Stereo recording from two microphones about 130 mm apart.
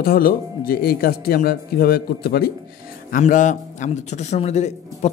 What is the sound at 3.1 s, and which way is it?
A man's voice, 75° left (ahead or behind).